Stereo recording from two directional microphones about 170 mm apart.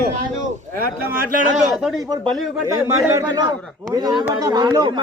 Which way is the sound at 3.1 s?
15° right (ahead or behind).